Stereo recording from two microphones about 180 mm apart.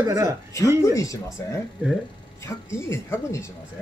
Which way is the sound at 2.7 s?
15° left (ahead or behind).